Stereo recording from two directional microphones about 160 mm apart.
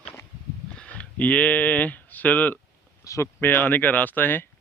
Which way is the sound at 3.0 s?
20° left (ahead or behind).